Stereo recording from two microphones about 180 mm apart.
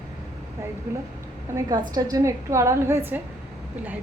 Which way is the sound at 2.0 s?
20° right (ahead or behind).